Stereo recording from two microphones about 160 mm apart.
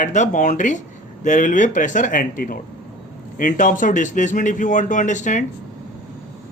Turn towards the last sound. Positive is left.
turn(degrees=50)  # may be behind; listen again after turning